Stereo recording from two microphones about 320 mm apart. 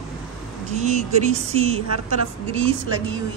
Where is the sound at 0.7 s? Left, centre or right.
Right.